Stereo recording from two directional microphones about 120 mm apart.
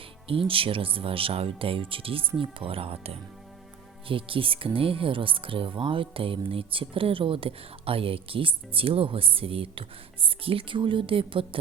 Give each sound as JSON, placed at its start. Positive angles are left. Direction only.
{"t": 0.3, "sound": "speech", "side_deg": -50}